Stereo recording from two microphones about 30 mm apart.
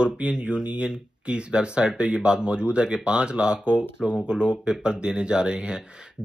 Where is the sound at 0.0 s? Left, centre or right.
Right.